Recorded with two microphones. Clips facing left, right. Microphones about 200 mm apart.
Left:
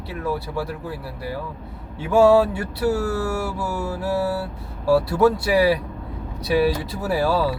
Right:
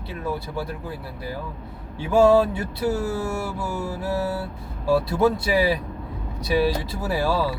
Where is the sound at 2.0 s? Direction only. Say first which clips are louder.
Left 2 dB; 10° left (ahead or behind).